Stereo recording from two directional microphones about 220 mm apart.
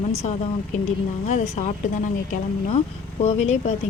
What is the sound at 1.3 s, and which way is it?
Speech, 30° left (ahead or behind).